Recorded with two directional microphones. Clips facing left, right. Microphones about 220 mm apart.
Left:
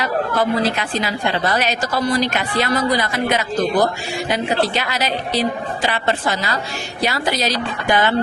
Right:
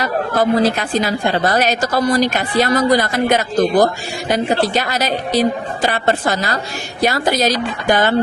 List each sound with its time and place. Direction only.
0.0 s a woman's voice: 40° right (ahead or behind)